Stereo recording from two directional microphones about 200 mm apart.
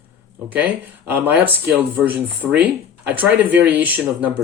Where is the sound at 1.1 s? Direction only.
10° right (ahead or behind).